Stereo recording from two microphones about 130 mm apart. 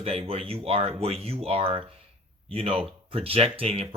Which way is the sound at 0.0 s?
45° right (ahead or behind).